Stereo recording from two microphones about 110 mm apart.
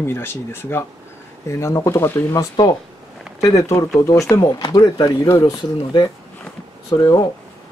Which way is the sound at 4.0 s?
30° left (ahead or behind).